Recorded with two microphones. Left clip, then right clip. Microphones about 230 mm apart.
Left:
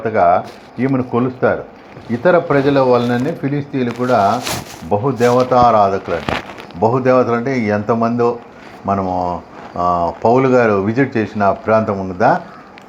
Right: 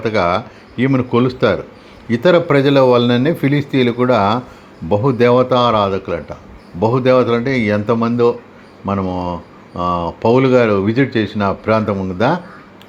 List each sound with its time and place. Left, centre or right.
0.2 s speech: right
2.2 s speech: right